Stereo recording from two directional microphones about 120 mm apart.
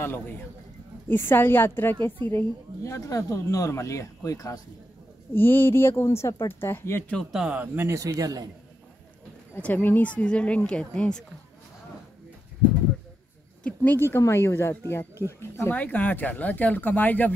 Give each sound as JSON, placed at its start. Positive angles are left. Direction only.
{"t": 1.0, "sound": "speech", "side_deg": 15}
{"t": 5.3, "sound": "speech", "side_deg": 20}
{"t": 7.3, "sound": "speech", "side_deg": -10}
{"t": 9.6, "sound": "speech", "side_deg": 15}
{"t": 13.7, "sound": "speech", "side_deg": 15}